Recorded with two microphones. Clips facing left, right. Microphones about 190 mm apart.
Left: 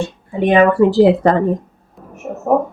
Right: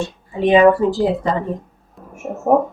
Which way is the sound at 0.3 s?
60° left (ahead or behind).